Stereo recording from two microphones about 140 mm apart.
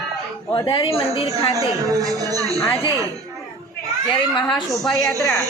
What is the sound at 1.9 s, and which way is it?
Speech, 25° right (ahead or behind).